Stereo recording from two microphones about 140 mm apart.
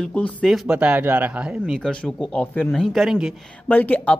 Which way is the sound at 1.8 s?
5° left (ahead or behind).